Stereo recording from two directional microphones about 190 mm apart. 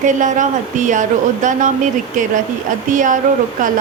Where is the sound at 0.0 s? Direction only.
40° right (ahead or behind).